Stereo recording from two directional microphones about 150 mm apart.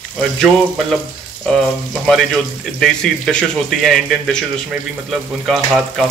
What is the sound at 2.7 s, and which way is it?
Speech, centre (ahead or behind).